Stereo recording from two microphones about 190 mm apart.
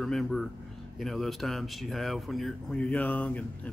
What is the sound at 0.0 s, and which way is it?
A man's voice, 5° left (ahead or behind).